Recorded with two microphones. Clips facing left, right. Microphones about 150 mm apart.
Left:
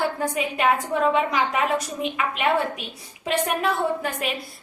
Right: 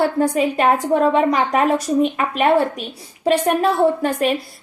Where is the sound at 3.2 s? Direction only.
35° right (ahead or behind).